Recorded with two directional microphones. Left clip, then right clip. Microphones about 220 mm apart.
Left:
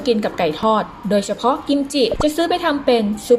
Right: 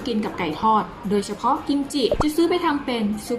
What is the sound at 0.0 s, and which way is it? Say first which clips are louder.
A woman's voice: left 8 dB; 30° left (ahead or behind).